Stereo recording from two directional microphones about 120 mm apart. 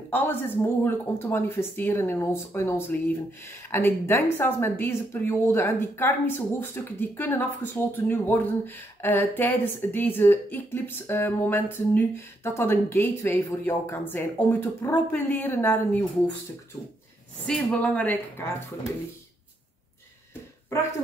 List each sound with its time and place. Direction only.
0.1 s speech: 15° left (ahead or behind)
17.5 s speech: 10° left (ahead or behind)